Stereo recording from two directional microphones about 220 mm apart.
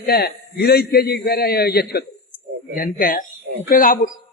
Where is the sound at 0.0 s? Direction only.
45° left (ahead or behind).